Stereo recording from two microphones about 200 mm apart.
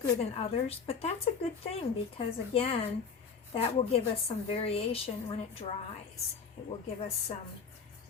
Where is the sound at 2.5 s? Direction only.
30° left (ahead or behind).